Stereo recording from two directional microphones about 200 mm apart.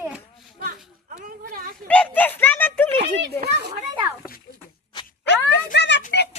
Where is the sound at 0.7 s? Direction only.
40° right (ahead or behind).